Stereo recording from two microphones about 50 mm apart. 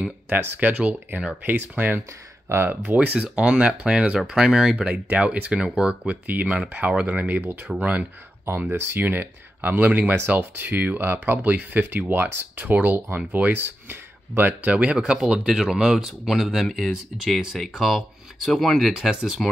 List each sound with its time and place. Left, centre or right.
0.3 s speech: right
3.2 s speech: right
6.2 s speech: right
8.5 s speech: right
15.1 s speech: centre